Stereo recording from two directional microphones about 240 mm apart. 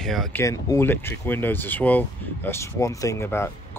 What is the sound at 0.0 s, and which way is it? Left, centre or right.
Speech, centre.